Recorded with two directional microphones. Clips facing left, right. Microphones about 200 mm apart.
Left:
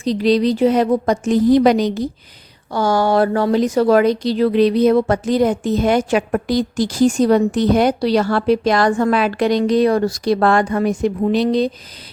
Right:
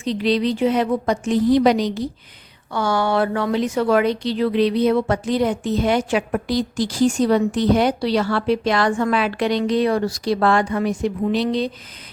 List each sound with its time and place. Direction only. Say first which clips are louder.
0.0 s a woman's voice: left 4 dB; 40° left (ahead or behind)